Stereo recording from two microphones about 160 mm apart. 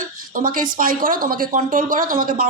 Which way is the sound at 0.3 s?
60° right (ahead or behind).